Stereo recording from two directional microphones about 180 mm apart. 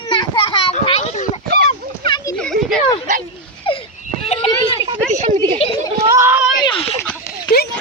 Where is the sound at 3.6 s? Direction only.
30° left (ahead or behind).